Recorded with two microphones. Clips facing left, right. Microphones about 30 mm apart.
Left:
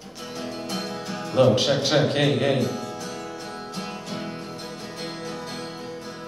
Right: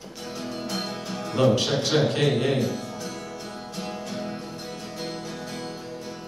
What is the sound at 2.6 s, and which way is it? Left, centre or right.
Speech, centre.